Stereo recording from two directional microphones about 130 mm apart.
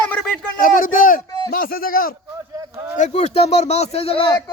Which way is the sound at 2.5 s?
25° right (ahead or behind).